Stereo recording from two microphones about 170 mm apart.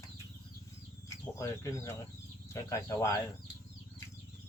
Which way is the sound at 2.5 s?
20° left (ahead or behind).